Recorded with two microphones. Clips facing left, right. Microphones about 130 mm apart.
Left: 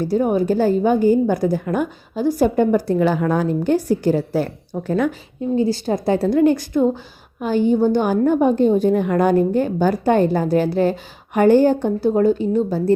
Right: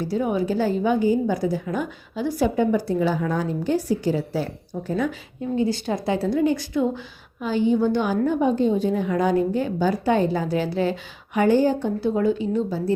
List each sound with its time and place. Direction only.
0.0 s a woman's voice: 45° left (ahead or behind)
2.2 s a woman's voice: 45° left (ahead or behind); by 5.1 s 65° left (ahead or behind)
5.5 s a woman's voice: 35° left (ahead or behind)